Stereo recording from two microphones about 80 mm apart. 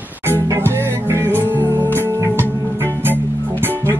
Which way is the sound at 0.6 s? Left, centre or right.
Right.